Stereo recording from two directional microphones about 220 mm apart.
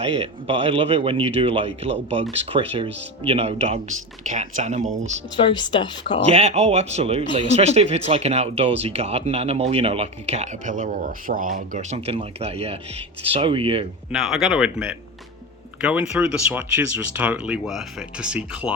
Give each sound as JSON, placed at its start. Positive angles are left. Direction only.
{"t": 0.0, "sound": "speech", "side_deg": -25}
{"t": 5.4, "sound": "speech", "side_deg": 20}
{"t": 6.2, "sound": "speech", "side_deg": -30}
{"t": 14.1, "sound": "speech", "side_deg": 0}